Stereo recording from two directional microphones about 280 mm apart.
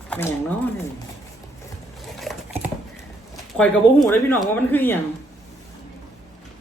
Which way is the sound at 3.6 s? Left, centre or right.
Centre.